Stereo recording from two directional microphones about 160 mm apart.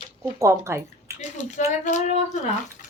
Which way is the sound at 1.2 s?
50° left (ahead or behind).